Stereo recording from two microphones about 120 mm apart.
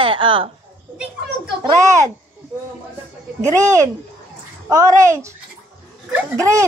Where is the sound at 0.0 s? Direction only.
45° right (ahead or behind).